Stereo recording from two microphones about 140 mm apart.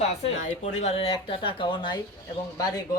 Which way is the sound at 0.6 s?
50° left (ahead or behind).